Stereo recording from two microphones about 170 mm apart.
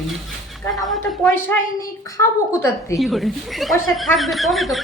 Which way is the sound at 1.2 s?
10° left (ahead or behind).